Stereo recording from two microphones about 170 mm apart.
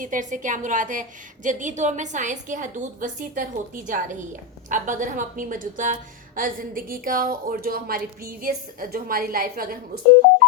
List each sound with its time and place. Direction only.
0.0 s a woman's voice: 50° right (ahead or behind)